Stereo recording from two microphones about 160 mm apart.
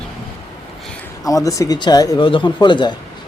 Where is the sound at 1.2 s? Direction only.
20° left (ahead or behind).